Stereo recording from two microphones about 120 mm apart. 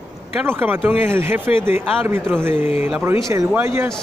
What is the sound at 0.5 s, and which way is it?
Speech, 15° right (ahead or behind).